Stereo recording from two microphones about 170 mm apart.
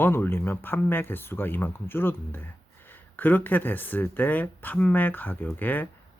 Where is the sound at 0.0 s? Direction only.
10° left (ahead or behind).